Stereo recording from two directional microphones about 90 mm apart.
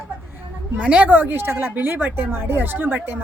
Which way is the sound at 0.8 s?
15° right (ahead or behind).